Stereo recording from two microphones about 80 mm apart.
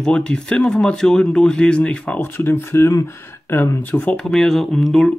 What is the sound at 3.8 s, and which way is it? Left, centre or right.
Speech, centre.